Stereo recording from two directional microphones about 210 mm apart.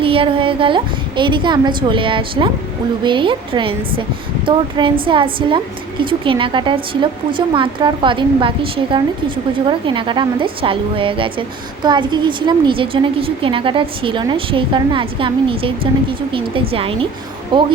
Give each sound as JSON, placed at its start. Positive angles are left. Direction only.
{"t": 0.0, "sound": "speech", "side_deg": -25}